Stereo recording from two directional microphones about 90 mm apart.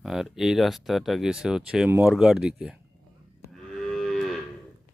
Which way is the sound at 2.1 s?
5° right (ahead or behind).